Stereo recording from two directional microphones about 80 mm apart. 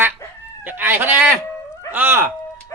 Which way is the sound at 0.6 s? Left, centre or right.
Right.